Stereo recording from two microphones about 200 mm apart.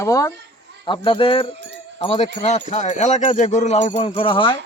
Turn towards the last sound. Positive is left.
turn(degrees=25)  # may be behind; listen again after turning